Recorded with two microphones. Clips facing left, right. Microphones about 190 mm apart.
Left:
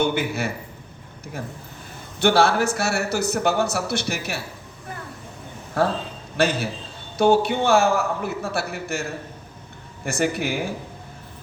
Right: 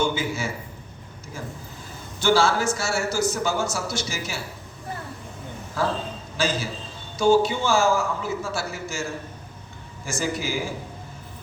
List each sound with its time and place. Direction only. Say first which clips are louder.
0.0 s a man's voice: left 2 dB; 60° left (ahead or behind)
2.1 s a man's voice: left 2 dB; 60° left (ahead or behind)
5.8 s a man's voice: left 4 dB; 60° left (ahead or behind)